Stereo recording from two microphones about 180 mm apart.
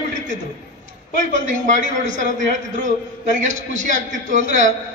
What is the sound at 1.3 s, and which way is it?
Speech, 45° right (ahead or behind).